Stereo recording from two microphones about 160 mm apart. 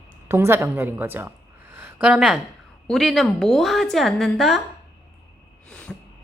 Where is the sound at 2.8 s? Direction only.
Centre (ahead or behind).